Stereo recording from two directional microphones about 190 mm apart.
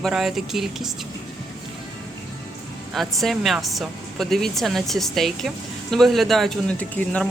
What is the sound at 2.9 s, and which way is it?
Speech, centre (ahead or behind).